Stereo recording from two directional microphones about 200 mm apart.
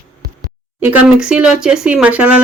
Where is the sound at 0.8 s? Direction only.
5° right (ahead or behind).